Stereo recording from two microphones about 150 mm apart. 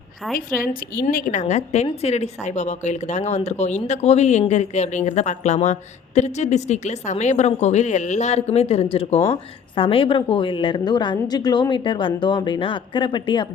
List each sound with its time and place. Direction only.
0.3 s a woman's voice: 70° left (ahead or behind)
1.1 s a woman's voice: 60° left (ahead or behind); by 13.5 s 30° left (ahead or behind)